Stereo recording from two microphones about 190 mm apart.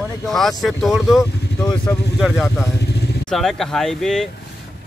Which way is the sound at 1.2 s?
15° left (ahead or behind).